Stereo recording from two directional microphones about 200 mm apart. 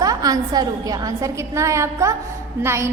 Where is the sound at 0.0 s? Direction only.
20° right (ahead or behind).